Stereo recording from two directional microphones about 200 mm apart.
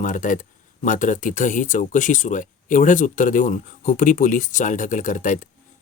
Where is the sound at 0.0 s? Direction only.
40° left (ahead or behind).